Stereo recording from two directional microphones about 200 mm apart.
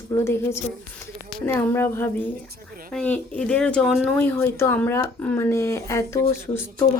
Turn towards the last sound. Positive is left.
turn(degrees=10)  # may be behind; listen again after turning